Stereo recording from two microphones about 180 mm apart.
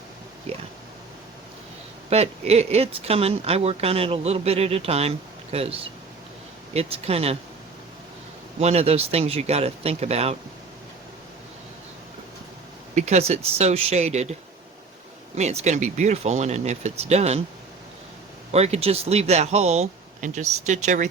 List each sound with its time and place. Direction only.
2.0 s speech: 35° right (ahead or behind)
8.5 s speech: 35° right (ahead or behind)
12.9 s speech: 40° right (ahead or behind)
15.4 s speech: 40° right (ahead or behind)
18.5 s speech: 35° right (ahead or behind)